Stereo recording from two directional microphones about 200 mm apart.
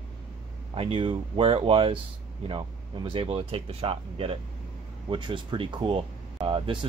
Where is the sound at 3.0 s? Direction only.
25° right (ahead or behind).